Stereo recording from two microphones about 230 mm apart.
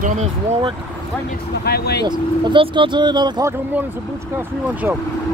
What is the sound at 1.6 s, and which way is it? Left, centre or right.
Speech, left.